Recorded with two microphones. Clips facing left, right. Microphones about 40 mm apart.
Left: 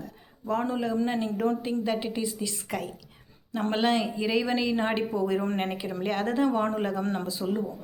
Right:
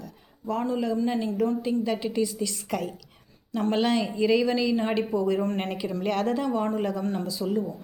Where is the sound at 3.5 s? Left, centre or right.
Left.